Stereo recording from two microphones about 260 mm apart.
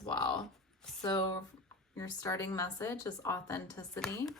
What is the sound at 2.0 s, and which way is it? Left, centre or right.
A woman's voice, centre.